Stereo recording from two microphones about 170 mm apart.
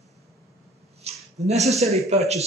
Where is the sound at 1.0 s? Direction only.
40° right (ahead or behind).